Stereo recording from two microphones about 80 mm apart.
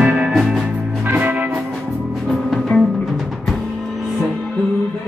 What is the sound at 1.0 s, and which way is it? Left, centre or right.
Music, right.